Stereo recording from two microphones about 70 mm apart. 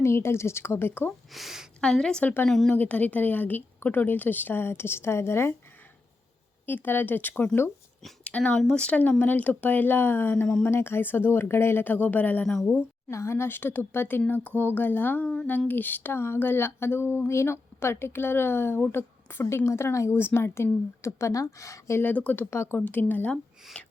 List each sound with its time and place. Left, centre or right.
0.0 s a sound: left
1.3 s speech: centre
1.8 s a woman's voice: centre
2.2 s a woman's voice: left
6.7 s a woman's voice: left
10.3 s a woman's voice: centre
10.7 s a woman's voice: left
13.1 s a sound: left
14.3 s a woman's voice: left
15.4 s a sound: left
22.8 s a woman's voice: left
23.8 s a sound: centre